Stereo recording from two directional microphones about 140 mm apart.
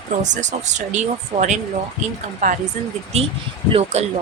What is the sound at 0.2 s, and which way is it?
Speech, 60° right (ahead or behind).